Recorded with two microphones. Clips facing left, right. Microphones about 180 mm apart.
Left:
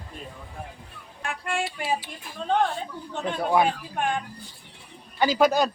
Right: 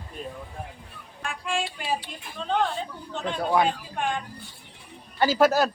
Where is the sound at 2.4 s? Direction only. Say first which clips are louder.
Left 3 dB; 50° left (ahead or behind).